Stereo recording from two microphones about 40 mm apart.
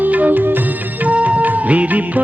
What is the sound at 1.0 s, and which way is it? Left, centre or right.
Music of bollywood, right.